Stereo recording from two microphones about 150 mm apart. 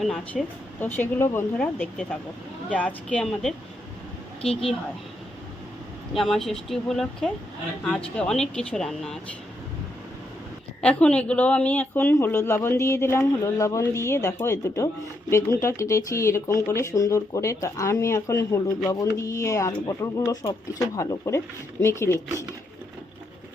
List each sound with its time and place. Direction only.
0.0 s speech: centre (ahead or behind)
0.8 s a woman's voice: 10° left (ahead or behind)
6.1 s speech: centre (ahead or behind)
10.8 s a woman's voice: 5° left (ahead or behind)